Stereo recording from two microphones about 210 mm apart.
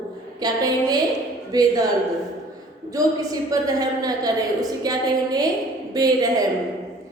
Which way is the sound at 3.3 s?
15° right (ahead or behind).